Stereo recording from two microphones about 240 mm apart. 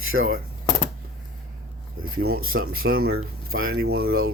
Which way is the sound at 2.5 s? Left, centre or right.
Right.